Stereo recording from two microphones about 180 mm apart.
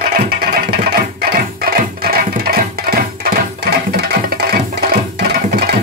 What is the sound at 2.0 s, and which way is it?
Music, 55° right (ahead or behind).